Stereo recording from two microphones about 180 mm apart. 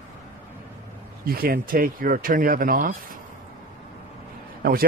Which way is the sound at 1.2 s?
55° right (ahead or behind).